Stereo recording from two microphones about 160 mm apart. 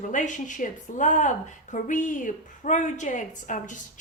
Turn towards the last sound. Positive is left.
turn(degrees=50)  # may be behind; listen again after turning